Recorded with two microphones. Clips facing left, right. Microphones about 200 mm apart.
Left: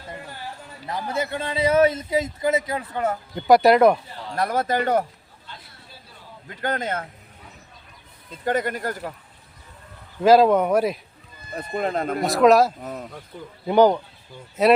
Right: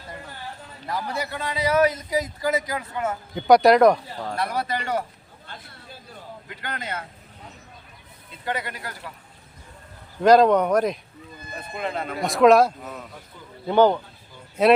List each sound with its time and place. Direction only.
0.9 s a man's voice: 20° left (ahead or behind)
3.3 s speech: centre (ahead or behind)
4.4 s speech: 45° left (ahead or behind)
5.5 s a sound: 50° right (ahead or behind)
6.6 s speech: 45° left (ahead or behind)
8.3 s speech: 45° left (ahead or behind)
10.2 s speech: 5° left (ahead or behind)
11.7 s speech: 40° left (ahead or behind)
12.2 s speech: centre (ahead or behind)
12.8 s speech: 40° left (ahead or behind)
13.7 s speech: 10° left (ahead or behind)
14.6 s speech: centre (ahead or behind)